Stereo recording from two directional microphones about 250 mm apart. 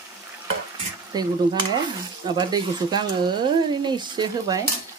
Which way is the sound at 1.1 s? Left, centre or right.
Centre.